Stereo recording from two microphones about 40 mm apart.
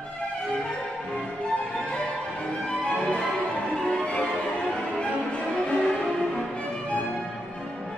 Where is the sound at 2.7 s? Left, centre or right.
Left.